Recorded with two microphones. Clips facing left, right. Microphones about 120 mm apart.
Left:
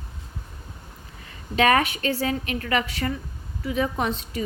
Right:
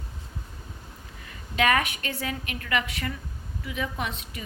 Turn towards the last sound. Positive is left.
turn(degrees=35)  # may be behind; listen again after turning